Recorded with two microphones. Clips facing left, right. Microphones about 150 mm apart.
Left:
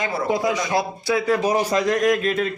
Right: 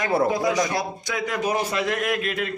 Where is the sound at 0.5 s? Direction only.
25° left (ahead or behind).